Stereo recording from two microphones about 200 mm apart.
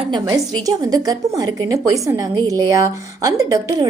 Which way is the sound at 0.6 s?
20° right (ahead or behind).